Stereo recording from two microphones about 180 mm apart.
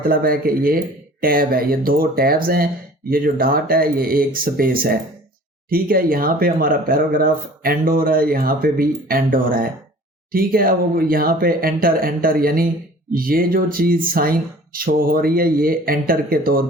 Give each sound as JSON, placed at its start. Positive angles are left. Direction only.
{"t": 0.0, "sound": "speech", "side_deg": -55}